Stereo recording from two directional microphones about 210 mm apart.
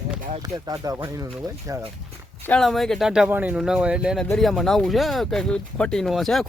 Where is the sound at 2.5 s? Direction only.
Centre (ahead or behind).